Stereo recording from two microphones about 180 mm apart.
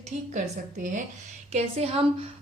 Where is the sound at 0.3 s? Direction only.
45° right (ahead or behind).